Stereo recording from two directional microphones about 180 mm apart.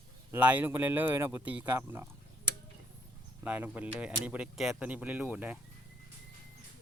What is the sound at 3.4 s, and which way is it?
Speech, 10° right (ahead or behind).